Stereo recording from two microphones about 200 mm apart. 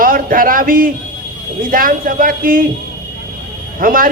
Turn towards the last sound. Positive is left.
turn(degrees=-45)  # may be behind; listen again after turning